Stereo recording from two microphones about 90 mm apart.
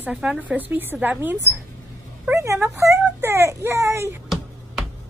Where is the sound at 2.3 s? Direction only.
30° right (ahead or behind).